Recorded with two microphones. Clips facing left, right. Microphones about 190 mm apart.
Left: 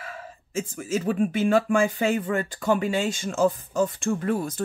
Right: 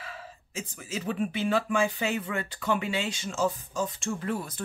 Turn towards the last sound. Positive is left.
turn(degrees=45)  # may be behind; listen again after turning